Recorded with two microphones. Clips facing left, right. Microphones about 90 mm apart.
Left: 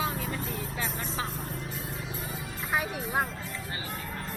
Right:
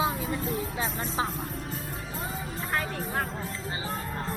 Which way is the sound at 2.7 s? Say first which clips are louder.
Left 2 dB; 5° left (ahead or behind).